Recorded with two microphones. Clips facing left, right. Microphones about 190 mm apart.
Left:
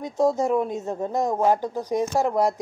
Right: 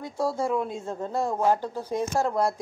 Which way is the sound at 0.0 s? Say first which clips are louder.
Left 6 dB; 20° left (ahead or behind).